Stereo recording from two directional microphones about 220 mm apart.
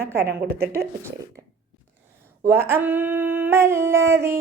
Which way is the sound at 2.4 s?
10° right (ahead or behind).